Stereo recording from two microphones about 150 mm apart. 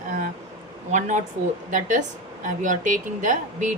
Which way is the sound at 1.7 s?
55° right (ahead or behind).